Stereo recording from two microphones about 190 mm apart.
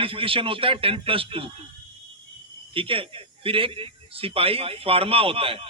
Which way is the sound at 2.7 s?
30° right (ahead or behind).